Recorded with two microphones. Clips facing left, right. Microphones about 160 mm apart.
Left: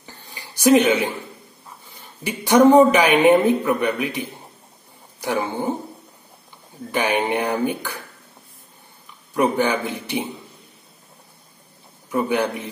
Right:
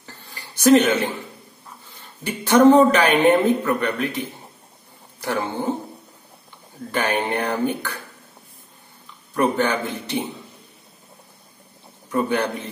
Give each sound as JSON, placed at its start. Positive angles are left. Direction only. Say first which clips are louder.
{"t": 0.0, "sound": "a sound", "louder": "left 1 dB", "side_deg": 15}
{"t": 2.2, "sound": "speech", "louder": "even", "side_deg": 15}
{"t": 5.2, "sound": "speech", "louder": "left 1 dB", "side_deg": 10}
{"t": 6.9, "sound": "speech", "louder": "left 2 dB", "side_deg": 10}
{"t": 9.3, "sound": "speech", "louder": "left 1 dB", "side_deg": 10}
{"t": 12.1, "sound": "speech", "louder": "left 1 dB", "side_deg": 10}